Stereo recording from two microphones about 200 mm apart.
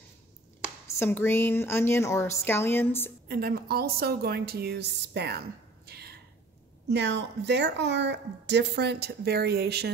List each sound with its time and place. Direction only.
0.9 s a woman's voice: 10° left (ahead or behind)
3.3 s a woman's voice: 50° right (ahead or behind)
5.9 s a sound: 55° right (ahead or behind)
6.9 s speech: 60° right (ahead or behind)